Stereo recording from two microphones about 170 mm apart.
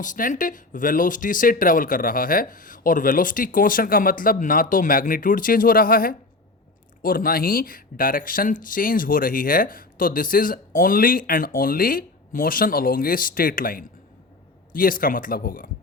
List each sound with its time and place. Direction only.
0.0 s speech: 50° left (ahead or behind)